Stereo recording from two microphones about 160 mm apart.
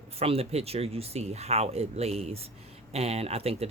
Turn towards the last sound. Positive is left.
turn(degrees=-40)  # may be behind; listen again after turning